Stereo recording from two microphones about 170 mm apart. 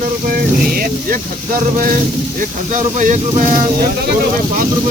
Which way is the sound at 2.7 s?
50° right (ahead or behind).